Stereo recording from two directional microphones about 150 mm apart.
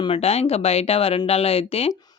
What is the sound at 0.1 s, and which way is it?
Speech, 40° left (ahead or behind).